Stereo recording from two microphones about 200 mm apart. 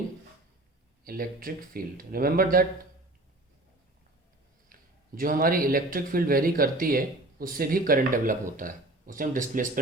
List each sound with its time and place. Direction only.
1.0 s a man's voice: 45° right (ahead or behind)
4.7 s a man's voice: 45° right (ahead or behind)